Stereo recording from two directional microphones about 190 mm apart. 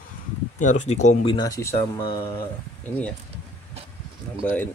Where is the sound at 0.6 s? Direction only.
40° left (ahead or behind).